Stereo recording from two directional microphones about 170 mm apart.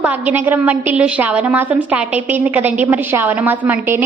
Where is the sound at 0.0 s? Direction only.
10° right (ahead or behind).